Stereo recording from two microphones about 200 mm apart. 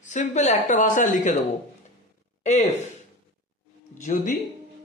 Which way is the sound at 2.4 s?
35° left (ahead or behind).